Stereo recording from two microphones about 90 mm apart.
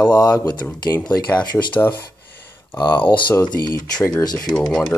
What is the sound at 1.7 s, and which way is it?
Speech, 20° left (ahead or behind).